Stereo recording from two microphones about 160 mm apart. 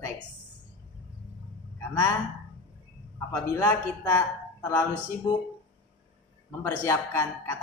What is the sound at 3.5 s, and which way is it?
Speech, 15° left (ahead or behind).